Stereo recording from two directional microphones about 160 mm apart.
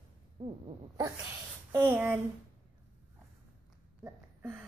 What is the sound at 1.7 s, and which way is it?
Speech, 15° right (ahead or behind).